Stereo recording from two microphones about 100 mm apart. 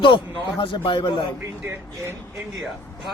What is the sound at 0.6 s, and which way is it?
Speech, 55° left (ahead or behind).